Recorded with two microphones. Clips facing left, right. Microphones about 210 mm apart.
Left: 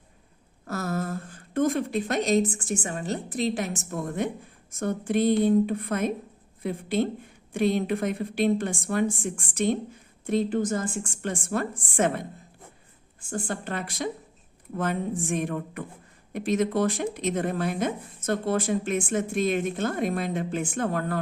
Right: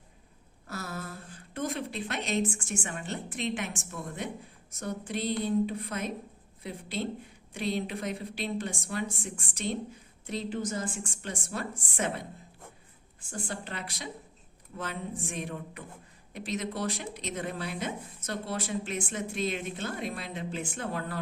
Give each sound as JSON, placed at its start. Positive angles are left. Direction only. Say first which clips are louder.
{"t": 0.7, "sound": "a woman's voice", "louder": "left 9 dB", "side_deg": 45}